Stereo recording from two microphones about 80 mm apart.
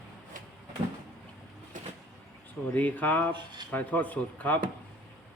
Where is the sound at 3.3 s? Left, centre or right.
Right.